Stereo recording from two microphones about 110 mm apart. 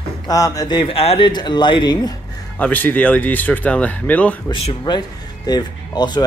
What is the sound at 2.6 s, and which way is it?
Speech, 15° left (ahead or behind).